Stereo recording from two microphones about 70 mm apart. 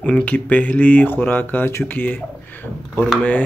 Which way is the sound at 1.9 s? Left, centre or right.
Left.